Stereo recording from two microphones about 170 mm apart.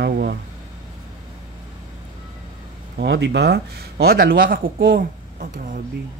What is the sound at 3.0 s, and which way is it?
Speech, 85° right.